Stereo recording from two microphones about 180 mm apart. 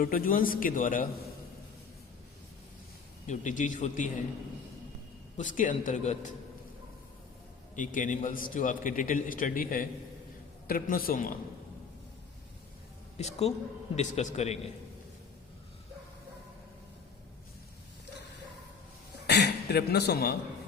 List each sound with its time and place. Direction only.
0.0 s a man's voice: 50° left (ahead or behind)
3.2 s a man's voice: 45° left (ahead or behind)
5.4 s a man's voice: 45° left (ahead or behind)
7.8 s a man's voice: 45° left (ahead or behind)
13.1 s a man's voice: 35° left (ahead or behind)
19.3 s a man's voice: 70° left (ahead or behind)